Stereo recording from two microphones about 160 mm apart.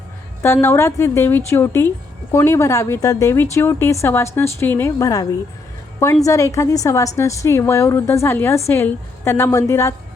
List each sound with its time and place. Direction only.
0.4 s a woman's voice: 15° left (ahead or behind)
6.2 s a woman's voice: 20° left (ahead or behind)